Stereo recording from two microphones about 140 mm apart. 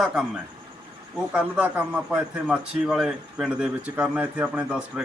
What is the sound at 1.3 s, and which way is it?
A man's voice, 10° right (ahead or behind).